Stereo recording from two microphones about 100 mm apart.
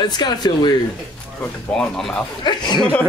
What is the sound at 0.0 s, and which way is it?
Speech, 45° left (ahead or behind).